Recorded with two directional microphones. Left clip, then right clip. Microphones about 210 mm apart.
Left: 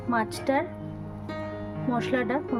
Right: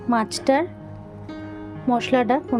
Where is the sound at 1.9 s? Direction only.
35° right (ahead or behind).